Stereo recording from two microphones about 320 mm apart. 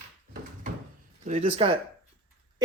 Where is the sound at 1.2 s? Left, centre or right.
Centre.